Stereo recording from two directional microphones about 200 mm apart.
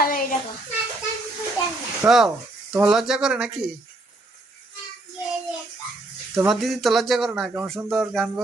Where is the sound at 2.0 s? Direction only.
15° right (ahead or behind).